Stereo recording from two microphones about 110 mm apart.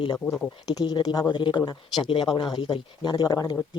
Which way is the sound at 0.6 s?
35° left (ahead or behind).